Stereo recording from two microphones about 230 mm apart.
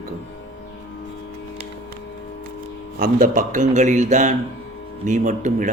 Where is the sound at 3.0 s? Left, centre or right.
Right.